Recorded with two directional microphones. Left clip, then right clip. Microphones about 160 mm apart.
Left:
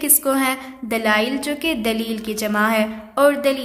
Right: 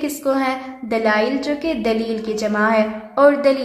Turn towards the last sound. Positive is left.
turn(degrees=30)  # may be behind; listen again after turning